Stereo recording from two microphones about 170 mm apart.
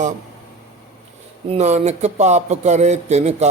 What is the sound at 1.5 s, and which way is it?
Mantra, 40° right (ahead or behind).